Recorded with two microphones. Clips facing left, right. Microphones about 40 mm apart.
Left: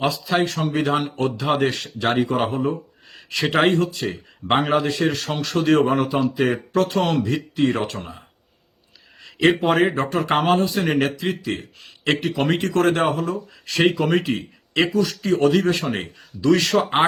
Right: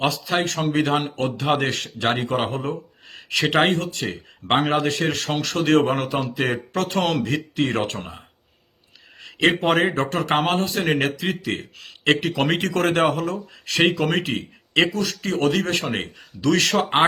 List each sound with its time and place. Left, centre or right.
0.0 s a man's voice: right
7.2 s speech: right
9.2 s a man's voice: right
11.3 s speech: right
12.2 s a man's voice: right